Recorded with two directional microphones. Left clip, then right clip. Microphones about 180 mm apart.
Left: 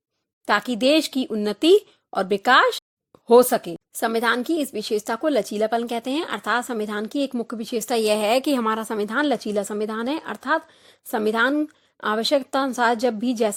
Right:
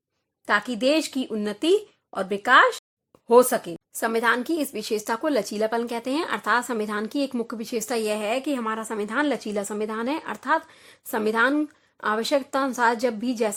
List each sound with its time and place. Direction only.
0.4 s speech: 35° left (ahead or behind)